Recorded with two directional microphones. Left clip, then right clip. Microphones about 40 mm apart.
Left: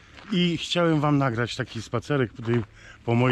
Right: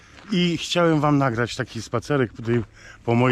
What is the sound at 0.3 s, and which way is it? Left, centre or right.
Speech, right.